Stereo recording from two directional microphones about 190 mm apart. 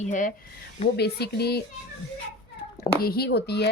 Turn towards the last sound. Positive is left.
turn(degrees=60)  # may be behind; listen again after turning